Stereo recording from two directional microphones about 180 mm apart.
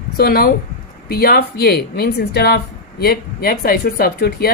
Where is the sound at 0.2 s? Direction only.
55° left (ahead or behind).